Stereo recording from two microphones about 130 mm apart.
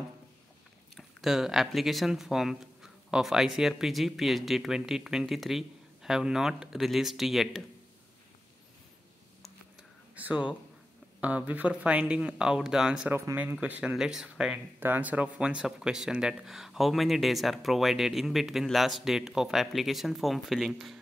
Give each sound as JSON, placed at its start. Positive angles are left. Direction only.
{"t": 0.9, "sound": "speech", "side_deg": 0}
{"t": 10.1, "sound": "speech", "side_deg": -10}
{"t": 13.1, "sound": "speech", "side_deg": -20}
{"t": 13.4, "sound": "speech", "side_deg": -10}